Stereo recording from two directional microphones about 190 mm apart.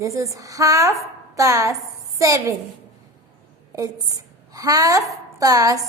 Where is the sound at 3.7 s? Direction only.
20° right (ahead or behind).